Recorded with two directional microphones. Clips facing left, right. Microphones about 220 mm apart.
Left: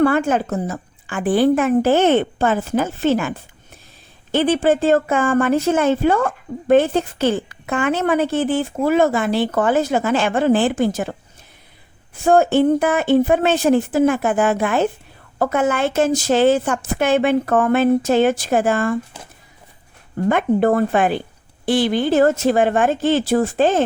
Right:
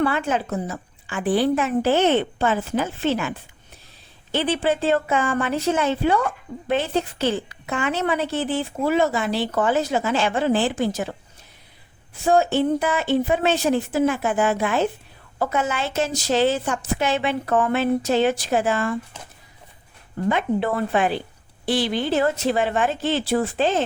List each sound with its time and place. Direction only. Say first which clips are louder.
0.0 s a woman's voice: left 6 dB; 45° left (ahead or behind)
12.1 s a woman's voice: left 4 dB; 50° left (ahead or behind)
20.2 s a woman's voice: left 6 dB; 50° left (ahead or behind)